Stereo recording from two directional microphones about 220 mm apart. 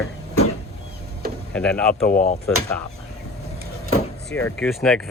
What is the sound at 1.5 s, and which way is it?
Speech, 5° left (ahead or behind).